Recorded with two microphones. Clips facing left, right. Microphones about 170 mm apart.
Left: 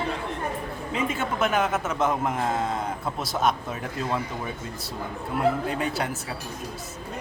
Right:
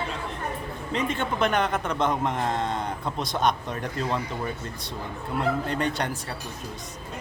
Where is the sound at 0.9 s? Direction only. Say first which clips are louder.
Right 1 dB; 5° left (ahead or behind).